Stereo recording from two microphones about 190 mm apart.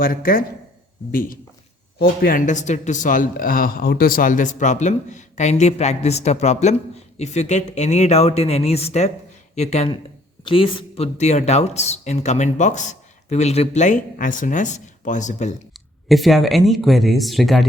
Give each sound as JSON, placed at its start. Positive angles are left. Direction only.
{"t": 0.0, "sound": "speech", "side_deg": 50}
{"t": 16.0, "sound": "speech", "side_deg": 0}